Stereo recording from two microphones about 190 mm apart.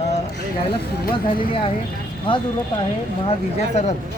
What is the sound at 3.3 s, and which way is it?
Speech, 35° left (ahead or behind).